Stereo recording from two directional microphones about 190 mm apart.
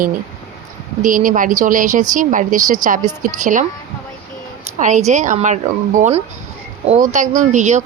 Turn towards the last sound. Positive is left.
turn(degrees=-40)  # may be behind; listen again after turning